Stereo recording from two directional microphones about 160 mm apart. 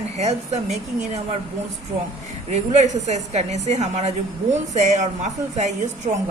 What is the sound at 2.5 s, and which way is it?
A woman's voice, 45° right (ahead or behind).